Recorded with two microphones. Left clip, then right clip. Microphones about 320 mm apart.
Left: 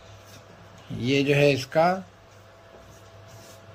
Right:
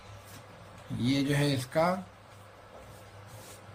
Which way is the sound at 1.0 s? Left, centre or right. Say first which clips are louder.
Left 9 dB; centre.